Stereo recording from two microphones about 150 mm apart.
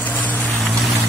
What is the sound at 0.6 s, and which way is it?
Boat, centre (ahead or behind).